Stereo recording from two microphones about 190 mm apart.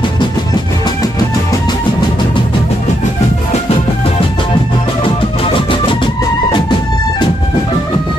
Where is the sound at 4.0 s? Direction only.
30° left (ahead or behind).